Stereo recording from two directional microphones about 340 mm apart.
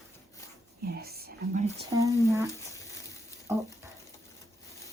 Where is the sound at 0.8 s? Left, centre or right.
Right; by 2.4 s centre.